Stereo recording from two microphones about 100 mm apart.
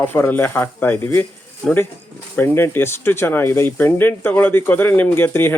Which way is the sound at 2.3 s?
20° left (ahead or behind).